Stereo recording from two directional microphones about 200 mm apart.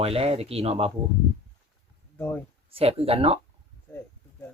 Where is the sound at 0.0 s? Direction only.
30° right (ahead or behind).